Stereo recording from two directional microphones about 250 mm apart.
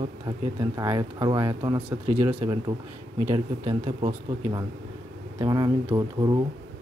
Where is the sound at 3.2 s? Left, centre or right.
Right.